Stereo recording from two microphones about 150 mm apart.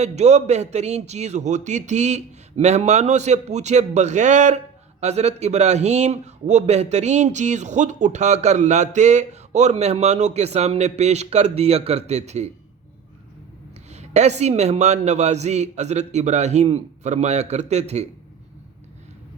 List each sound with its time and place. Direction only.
0.0 s a man's voice: 50° right (ahead or behind)
13.9 s a man's voice: 50° right (ahead or behind)